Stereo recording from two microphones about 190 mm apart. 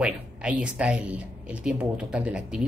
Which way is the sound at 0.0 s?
5° right (ahead or behind).